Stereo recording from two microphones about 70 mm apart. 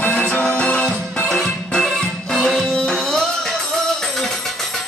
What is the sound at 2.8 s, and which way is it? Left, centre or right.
Music, centre.